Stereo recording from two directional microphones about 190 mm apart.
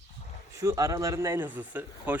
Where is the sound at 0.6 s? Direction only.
15° right (ahead or behind).